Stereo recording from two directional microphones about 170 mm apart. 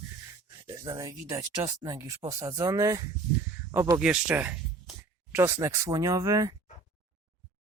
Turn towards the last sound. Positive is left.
turn(degrees=-20)  # may be behind; listen again after turning